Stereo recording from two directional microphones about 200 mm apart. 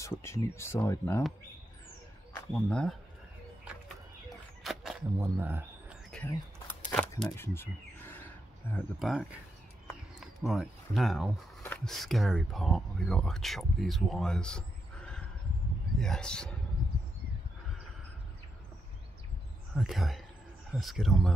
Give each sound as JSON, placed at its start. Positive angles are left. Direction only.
{"t": 0.0, "sound": "speech", "side_deg": 15}
{"t": 2.3, "sound": "speech", "side_deg": 5}
{"t": 4.6, "sound": "a sound", "side_deg": -5}
{"t": 6.1, "sound": "a sound", "side_deg": 5}
{"t": 9.0, "sound": "a man's voice", "side_deg": 0}
{"t": 19.7, "sound": "a man's voice", "side_deg": 0}